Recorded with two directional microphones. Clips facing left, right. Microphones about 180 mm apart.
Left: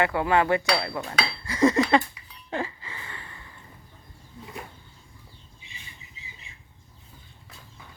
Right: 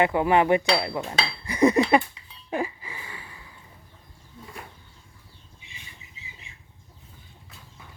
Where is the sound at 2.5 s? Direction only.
15° right (ahead or behind).